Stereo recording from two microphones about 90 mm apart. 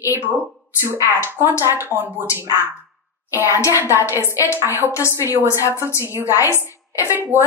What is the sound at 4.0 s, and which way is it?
Speech, 30° left (ahead or behind).